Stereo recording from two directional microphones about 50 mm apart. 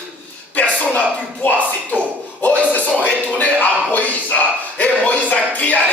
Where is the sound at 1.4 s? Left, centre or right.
Left.